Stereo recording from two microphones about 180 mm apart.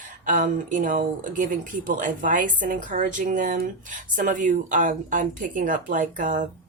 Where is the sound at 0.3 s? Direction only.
45° right (ahead or behind).